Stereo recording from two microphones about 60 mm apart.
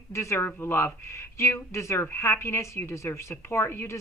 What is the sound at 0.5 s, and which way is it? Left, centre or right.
A woman's voice, left.